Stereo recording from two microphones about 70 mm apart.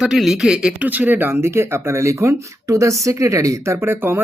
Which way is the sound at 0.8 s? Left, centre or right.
Right.